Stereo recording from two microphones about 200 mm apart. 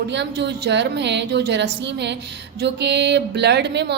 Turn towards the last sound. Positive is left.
turn(degrees=-60)  # may be behind; listen again after turning